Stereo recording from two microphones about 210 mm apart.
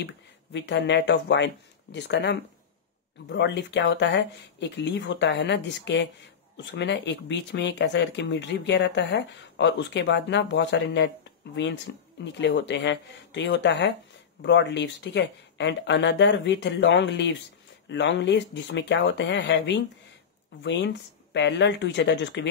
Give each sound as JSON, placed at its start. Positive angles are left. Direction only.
{"t": 0.0, "sound": "speech", "side_deg": 55}